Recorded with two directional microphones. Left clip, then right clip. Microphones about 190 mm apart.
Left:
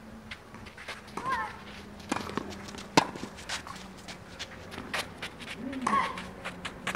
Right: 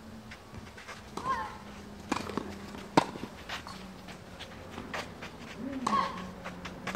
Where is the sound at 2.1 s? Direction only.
45° left (ahead or behind).